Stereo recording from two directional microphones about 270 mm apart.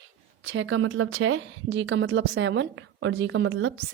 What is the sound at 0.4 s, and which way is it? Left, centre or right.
A woman's voice, right.